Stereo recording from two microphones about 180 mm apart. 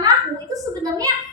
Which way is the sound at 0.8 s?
20° right (ahead or behind).